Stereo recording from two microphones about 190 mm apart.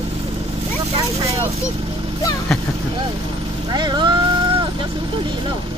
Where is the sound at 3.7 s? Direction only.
25° right (ahead or behind).